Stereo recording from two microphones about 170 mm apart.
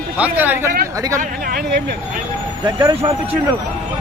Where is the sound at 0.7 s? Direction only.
55° right (ahead or behind).